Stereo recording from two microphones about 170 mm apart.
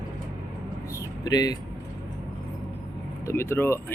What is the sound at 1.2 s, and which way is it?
Speech, 25° left (ahead or behind).